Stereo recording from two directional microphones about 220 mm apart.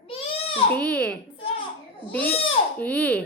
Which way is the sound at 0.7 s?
5° left (ahead or behind).